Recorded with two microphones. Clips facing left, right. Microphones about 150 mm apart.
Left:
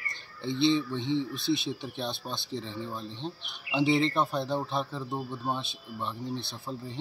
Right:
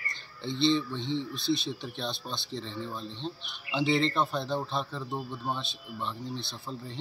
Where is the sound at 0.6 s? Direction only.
15° left (ahead or behind).